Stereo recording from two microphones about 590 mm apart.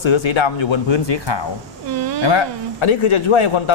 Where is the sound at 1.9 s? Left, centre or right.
Right.